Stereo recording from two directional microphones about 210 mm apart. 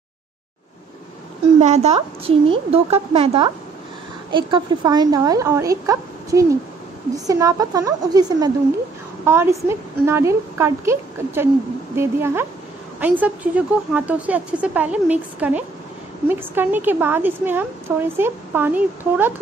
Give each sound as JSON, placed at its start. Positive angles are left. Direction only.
{"t": 1.6, "sound": "a woman's voice", "side_deg": -30}